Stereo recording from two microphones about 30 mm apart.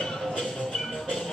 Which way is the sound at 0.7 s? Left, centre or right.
Centre.